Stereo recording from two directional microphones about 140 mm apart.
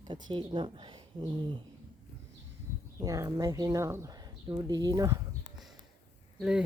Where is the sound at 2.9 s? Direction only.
25° right (ahead or behind).